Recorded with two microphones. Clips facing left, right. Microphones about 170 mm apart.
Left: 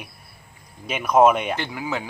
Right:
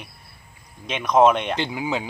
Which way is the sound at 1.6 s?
15° right (ahead or behind).